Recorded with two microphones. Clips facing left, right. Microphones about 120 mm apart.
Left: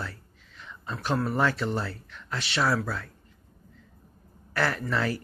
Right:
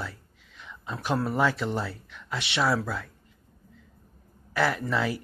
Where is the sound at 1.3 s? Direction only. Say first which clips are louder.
Even; 10° right (ahead or behind).